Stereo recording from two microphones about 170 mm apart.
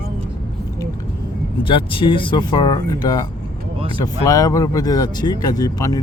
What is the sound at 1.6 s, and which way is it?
Speech, 30° left (ahead or behind).